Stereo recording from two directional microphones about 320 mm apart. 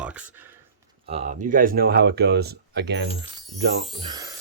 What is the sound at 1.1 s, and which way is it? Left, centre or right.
Speech, right.